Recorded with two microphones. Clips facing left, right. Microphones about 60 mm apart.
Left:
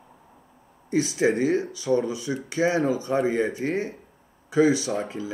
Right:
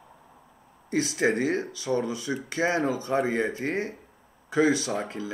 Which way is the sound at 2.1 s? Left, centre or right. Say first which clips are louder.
Left 2 dB; right.